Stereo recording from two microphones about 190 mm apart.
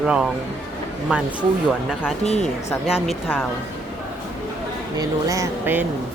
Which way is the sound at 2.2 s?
35° left (ahead or behind).